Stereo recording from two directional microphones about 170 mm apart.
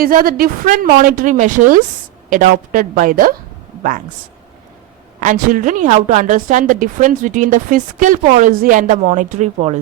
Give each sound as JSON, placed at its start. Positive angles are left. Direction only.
{"t": 0.0, "sound": "a woman's voice", "side_deg": -55}
{"t": 5.2, "sound": "a woman's voice", "side_deg": -50}